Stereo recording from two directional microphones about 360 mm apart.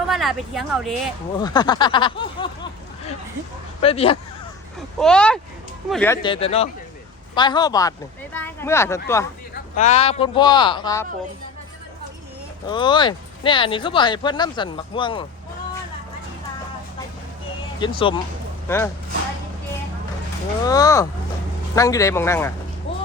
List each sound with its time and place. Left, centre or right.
0.1 s speech: centre
1.4 s speech: centre
4.9 s speech: centre
9.7 s speech: centre
12.6 s speech: centre
17.7 s speech: centre
20.7 s speech: centre
22.9 s a sound: centre